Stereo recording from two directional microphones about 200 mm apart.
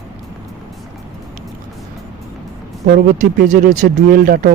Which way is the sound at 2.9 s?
40° right (ahead or behind).